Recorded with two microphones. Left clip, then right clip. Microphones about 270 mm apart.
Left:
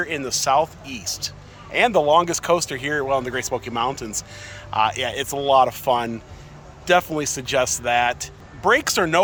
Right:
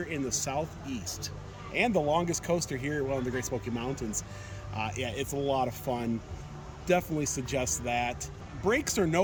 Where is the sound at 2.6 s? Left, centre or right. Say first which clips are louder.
Left 10 dB; centre.